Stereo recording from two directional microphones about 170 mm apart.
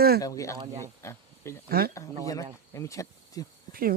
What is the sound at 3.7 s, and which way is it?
Speech, 60° right (ahead or behind).